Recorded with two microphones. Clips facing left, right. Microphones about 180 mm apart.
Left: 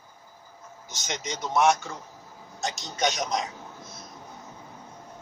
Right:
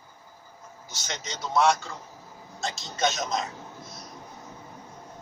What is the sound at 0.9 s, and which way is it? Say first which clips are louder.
A man's voice: left 3 dB; 15° left (ahead or behind).